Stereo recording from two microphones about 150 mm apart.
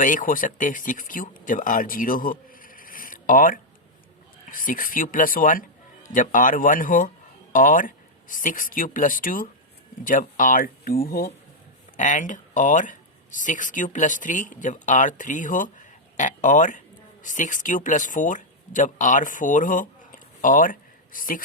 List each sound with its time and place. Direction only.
0.0 s a man's voice: 65° left (ahead or behind); by 11.3 s 80° left
11.9 s speech: 60° left (ahead or behind)